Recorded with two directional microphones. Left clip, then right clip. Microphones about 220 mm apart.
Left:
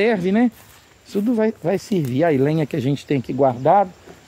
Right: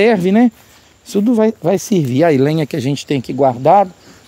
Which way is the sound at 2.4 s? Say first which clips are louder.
Right 4 dB; 25° right (ahead or behind).